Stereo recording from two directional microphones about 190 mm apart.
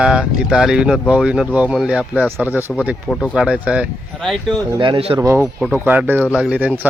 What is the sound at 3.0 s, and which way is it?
Speech, 5° left (ahead or behind).